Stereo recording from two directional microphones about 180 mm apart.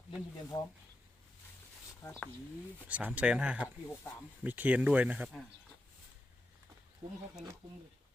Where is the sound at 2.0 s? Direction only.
15° left (ahead or behind).